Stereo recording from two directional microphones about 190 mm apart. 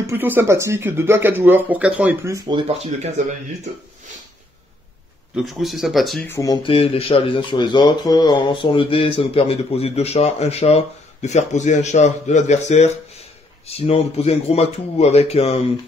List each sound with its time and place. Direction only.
0.0 s speech: 10° right (ahead or behind); by 3.3 s 35° right (ahead or behind)
5.3 s speech: centre (ahead or behind)
6.2 s speech: 15° left (ahead or behind)